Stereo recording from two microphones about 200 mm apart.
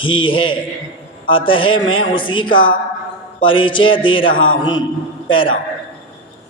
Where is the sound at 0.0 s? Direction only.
25° left (ahead or behind).